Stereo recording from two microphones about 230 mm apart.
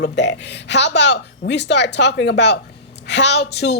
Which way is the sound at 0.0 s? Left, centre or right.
Left.